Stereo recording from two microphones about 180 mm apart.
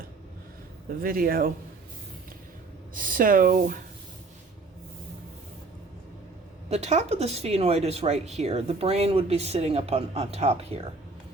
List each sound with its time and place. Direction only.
0.9 s speech: 50° right (ahead or behind)
2.9 s speech: 50° right (ahead or behind)
6.7 s speech: 40° right (ahead or behind)